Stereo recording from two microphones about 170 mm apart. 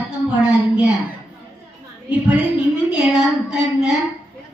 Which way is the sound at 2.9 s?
5° right (ahead or behind).